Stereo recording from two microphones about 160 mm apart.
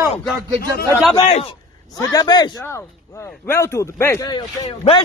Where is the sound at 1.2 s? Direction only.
40° left (ahead or behind).